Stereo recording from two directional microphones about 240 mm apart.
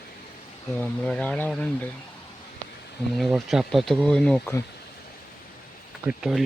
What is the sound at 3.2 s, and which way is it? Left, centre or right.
Speech, centre.